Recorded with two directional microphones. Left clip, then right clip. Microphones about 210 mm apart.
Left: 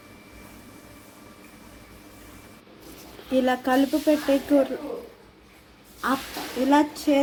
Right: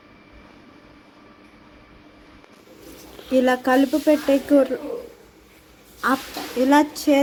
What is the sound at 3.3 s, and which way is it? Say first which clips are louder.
Speech: right 4 dB; 20° right (ahead or behind).